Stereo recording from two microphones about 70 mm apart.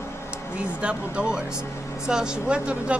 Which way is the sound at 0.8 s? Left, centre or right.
Centre.